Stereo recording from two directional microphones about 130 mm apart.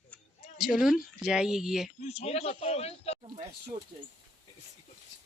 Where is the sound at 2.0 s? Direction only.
55° left (ahead or behind).